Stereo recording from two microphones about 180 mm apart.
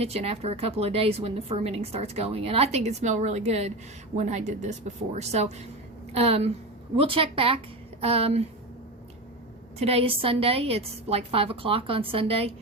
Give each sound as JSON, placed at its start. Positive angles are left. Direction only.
{"t": 0.0, "sound": "a woman's voice", "side_deg": -35}
{"t": 9.7, "sound": "a woman's voice", "side_deg": -35}